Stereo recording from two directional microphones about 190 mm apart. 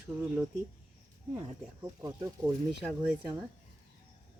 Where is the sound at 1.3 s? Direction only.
15° right (ahead or behind).